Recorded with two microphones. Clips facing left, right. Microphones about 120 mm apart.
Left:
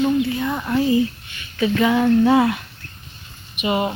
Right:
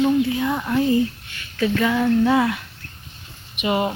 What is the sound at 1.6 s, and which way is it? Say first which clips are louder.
Speech: left 2 dB; 20° left (ahead or behind).